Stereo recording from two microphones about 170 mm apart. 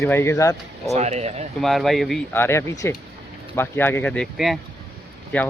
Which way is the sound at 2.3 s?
15° left (ahead or behind).